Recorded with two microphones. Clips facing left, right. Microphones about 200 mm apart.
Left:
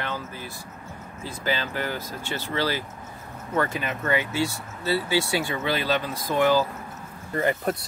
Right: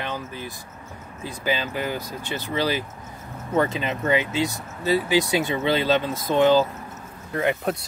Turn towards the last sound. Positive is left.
turn(degrees=0)  # may be behind; listen again after turning